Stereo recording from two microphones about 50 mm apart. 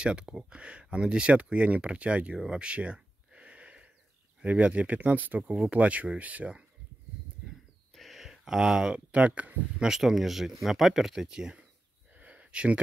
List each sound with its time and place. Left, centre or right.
0.0 s speech: centre
2.3 s a sound: centre
4.4 s speech: right
5.5 s speech: right
7.9 s a sound: centre
8.9 s speech: right
9.8 s speech: centre
11.2 s speech: centre
12.1 s a sound: right